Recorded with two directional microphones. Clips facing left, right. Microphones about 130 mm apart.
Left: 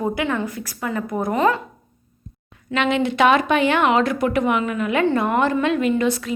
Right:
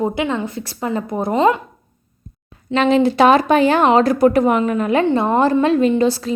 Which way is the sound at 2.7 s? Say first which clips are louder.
Right 6 dB; 35° right (ahead or behind).